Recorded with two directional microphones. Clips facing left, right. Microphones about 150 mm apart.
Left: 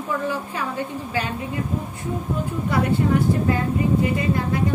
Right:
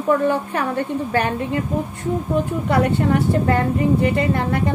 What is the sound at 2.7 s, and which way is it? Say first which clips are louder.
A woman's voice: right 2 dB; 60° right (ahead or behind).